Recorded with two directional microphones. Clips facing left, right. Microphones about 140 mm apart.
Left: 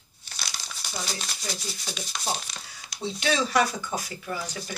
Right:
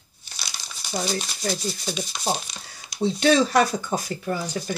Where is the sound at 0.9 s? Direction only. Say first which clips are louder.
Right 8 dB; 35° right (ahead or behind).